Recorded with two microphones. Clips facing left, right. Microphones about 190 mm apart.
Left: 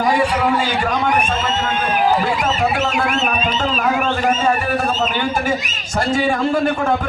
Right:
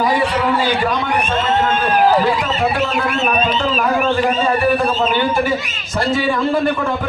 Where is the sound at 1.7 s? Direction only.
40° right (ahead or behind).